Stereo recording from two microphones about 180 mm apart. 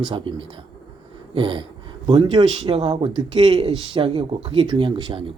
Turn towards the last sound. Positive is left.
turn(degrees=-30)  # may be behind; listen again after turning